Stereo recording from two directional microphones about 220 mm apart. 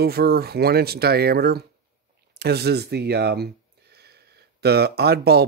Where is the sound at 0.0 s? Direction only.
45° right (ahead or behind).